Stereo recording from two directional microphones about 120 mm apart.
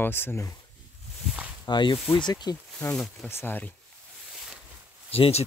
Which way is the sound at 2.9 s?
5° left (ahead or behind).